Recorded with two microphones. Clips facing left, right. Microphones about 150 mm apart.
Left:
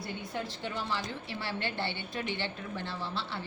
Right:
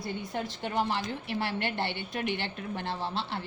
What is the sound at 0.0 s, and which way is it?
Speech, 20° right (ahead or behind).